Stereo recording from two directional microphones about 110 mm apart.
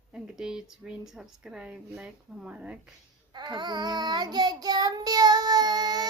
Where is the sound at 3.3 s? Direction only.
40° right (ahead or behind).